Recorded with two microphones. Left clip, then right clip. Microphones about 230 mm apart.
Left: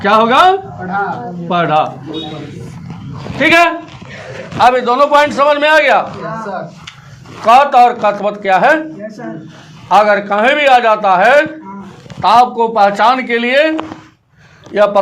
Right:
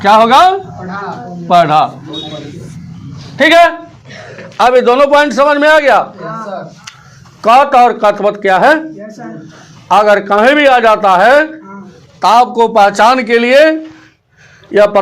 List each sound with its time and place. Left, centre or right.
0.0 s a man's voice: right
1.5 s a man's voice: right
3.3 s a man's voice: right
7.4 s a man's voice: right
9.9 s a man's voice: right